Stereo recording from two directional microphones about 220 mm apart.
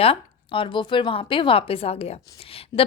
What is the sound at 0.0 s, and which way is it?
Speech, 25° left (ahead or behind).